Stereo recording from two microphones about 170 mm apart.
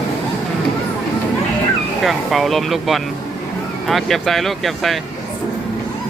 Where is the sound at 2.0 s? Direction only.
Centre (ahead or behind).